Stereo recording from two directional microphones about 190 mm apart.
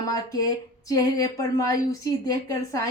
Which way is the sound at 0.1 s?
20° left (ahead or behind).